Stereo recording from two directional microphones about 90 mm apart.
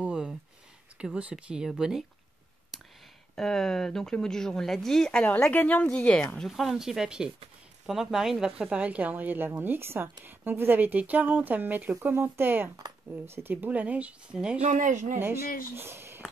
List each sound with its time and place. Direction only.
0.0 s a sound: 5° right (ahead or behind)
0.9 s speech: 10° right (ahead or behind)
2.7 s a sound: centre (ahead or behind)
3.3 s speech: 5° left (ahead or behind)
5.2 s a woman's voice: 15° left (ahead or behind)
6.5 s speech: 5° right (ahead or behind)
15.1 s speech: 25° right (ahead or behind)